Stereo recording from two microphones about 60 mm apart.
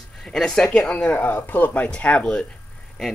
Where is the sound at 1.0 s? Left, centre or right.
Left.